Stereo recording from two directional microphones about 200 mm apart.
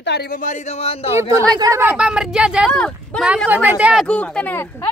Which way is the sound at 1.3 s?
15° right (ahead or behind).